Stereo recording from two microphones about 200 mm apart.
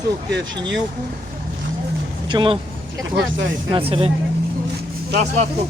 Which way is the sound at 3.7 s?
30° right (ahead or behind).